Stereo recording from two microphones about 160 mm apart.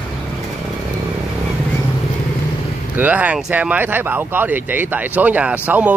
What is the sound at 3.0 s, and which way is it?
Speech, 10° right (ahead or behind).